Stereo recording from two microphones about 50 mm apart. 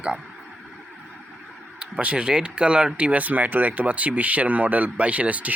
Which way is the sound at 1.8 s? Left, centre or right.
Right.